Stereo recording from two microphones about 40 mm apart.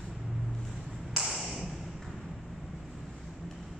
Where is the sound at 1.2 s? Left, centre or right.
Centre.